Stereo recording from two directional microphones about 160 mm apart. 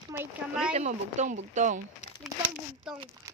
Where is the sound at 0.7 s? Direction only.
45° right (ahead or behind).